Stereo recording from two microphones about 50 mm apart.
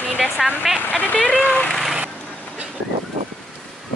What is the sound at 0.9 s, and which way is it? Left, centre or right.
Speech, left.